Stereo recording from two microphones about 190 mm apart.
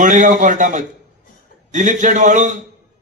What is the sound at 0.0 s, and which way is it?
A man's voice, 40° right (ahead or behind).